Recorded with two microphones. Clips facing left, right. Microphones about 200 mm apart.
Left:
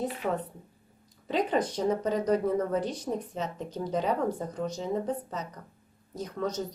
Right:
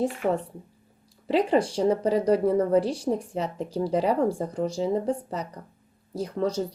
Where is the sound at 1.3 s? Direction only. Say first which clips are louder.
Right 5 dB; 30° right (ahead or behind).